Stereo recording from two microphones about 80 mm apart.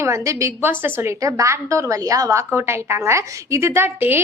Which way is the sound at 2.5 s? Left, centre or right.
Right.